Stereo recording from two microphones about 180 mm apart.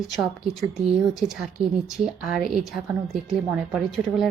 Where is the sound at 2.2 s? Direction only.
Centre (ahead or behind).